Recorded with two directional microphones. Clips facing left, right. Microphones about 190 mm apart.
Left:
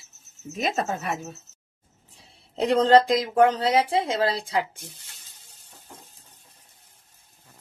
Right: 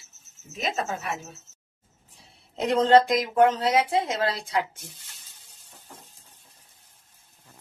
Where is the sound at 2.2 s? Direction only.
30° left (ahead or behind).